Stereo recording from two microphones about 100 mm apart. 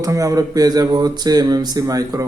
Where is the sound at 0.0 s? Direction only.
35° right (ahead or behind).